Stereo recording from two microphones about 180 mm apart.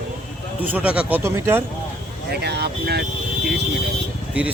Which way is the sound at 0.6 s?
10° right (ahead or behind).